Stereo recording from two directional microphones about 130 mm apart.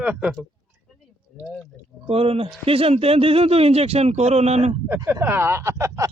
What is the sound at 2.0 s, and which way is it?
Speech, 50° right (ahead or behind).